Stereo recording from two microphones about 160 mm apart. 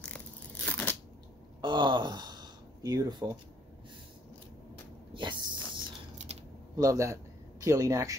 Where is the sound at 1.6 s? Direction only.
30° right (ahead or behind).